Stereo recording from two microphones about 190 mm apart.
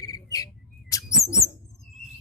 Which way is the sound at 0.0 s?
20° left (ahead or behind).